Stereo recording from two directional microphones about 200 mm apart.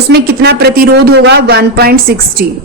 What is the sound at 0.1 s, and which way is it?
A woman's voice, 55° right (ahead or behind).